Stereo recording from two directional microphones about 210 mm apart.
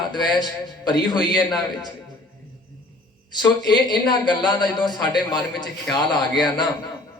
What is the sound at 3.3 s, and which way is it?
A man's voice, 20° left (ahead or behind).